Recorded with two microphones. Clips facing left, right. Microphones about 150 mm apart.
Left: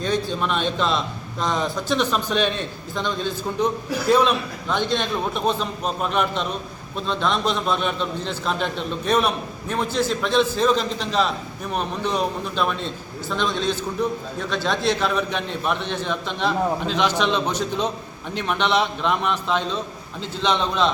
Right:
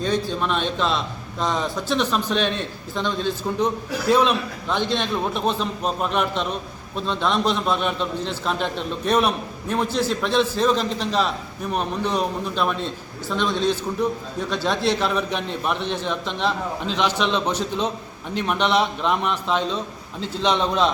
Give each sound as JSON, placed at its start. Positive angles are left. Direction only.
{"t": 0.3, "sound": "a man's voice", "side_deg": 0}
{"t": 17.4, "sound": "a man's voice", "side_deg": -30}
{"t": 18.3, "sound": "a man's voice", "side_deg": 0}